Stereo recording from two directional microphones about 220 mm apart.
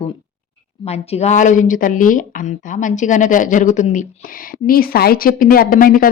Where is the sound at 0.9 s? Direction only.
30° left (ahead or behind).